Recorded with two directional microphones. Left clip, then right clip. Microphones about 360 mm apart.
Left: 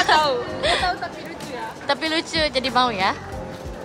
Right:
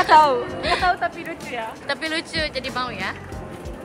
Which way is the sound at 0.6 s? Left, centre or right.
Centre.